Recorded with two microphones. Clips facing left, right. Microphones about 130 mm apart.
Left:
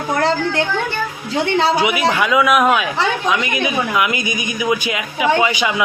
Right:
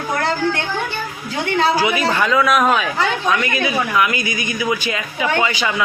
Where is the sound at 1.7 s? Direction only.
20° left (ahead or behind).